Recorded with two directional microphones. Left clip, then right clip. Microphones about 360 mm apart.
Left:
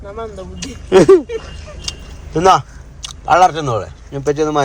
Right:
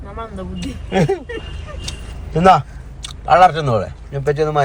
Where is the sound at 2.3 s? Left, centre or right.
Centre.